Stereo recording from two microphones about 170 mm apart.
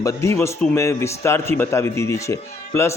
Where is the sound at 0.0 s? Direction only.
20° left (ahead or behind).